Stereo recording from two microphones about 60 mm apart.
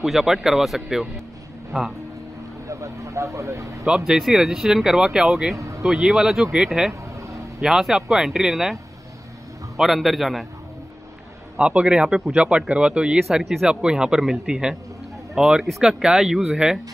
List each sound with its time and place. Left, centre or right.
0.0 s speech: centre
2.7 s speech: right
4.2 s speech: centre
5.6 s vehicle: right
5.9 s speech: centre
6.9 s vehicle: right
7.6 s speech: centre
9.8 s speech: centre
11.5 s speech: centre
13.4 s speech: centre
13.7 s speech: centre